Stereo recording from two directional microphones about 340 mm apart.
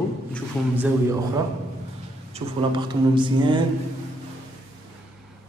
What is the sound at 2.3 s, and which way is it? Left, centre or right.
Speech, centre.